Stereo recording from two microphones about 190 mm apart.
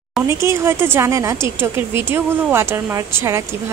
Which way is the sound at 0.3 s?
15° right (ahead or behind).